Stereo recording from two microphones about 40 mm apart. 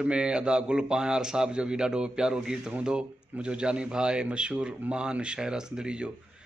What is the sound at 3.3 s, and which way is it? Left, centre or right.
A man's voice, right.